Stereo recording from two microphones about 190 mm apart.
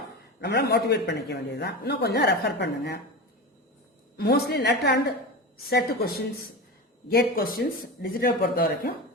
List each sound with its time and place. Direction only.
0.3 s a man's voice: 60° left (ahead or behind)
4.2 s a man's voice: 55° left (ahead or behind)